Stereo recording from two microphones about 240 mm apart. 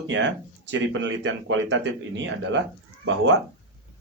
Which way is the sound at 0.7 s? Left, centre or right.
Right.